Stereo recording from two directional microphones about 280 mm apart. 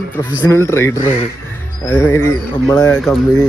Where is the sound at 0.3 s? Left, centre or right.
Centre.